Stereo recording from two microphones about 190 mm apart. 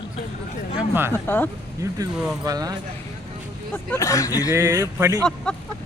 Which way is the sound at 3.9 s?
15° left (ahead or behind).